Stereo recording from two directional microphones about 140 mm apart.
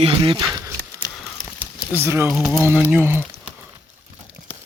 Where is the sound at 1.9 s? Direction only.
15° right (ahead or behind).